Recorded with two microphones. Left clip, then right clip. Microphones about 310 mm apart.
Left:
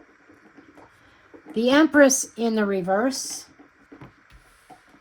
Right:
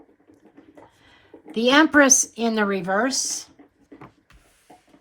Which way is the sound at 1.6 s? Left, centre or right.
Right.